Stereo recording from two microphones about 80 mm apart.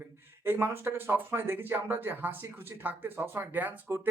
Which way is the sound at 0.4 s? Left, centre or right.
Right.